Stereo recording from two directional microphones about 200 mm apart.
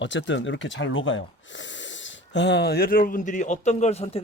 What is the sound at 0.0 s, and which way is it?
Speech, 65° left (ahead or behind).